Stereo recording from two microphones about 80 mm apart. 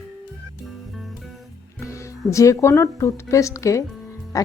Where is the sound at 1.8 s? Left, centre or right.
Left.